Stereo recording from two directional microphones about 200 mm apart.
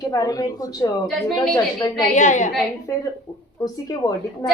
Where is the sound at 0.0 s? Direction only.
20° left (ahead or behind).